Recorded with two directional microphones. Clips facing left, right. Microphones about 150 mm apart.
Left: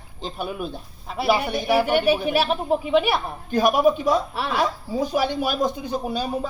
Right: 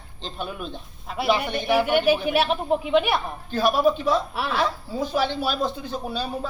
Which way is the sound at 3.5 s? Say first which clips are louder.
Left 2 dB; 15° left (ahead or behind).